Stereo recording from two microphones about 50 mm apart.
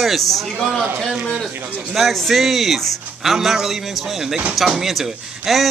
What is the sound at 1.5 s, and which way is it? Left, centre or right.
Speech, right.